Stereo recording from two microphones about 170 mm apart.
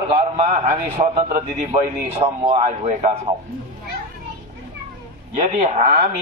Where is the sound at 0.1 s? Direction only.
35° right (ahead or behind).